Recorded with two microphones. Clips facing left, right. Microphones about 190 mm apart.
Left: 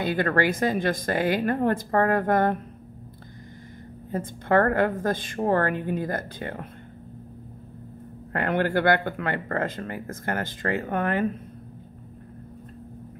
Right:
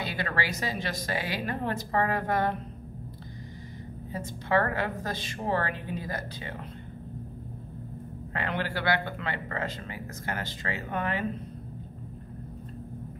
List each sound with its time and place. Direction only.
0.0 s speech: 50° left (ahead or behind)
4.1 s speech: 50° left (ahead or behind)
8.3 s speech: 50° left (ahead or behind)